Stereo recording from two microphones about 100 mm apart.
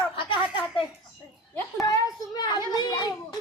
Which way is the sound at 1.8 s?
35° left (ahead or behind).